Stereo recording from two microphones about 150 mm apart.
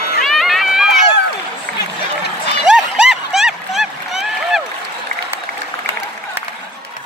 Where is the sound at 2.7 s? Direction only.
5° right (ahead or behind).